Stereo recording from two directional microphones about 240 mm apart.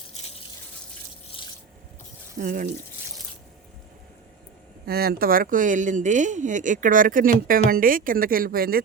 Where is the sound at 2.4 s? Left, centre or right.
Right.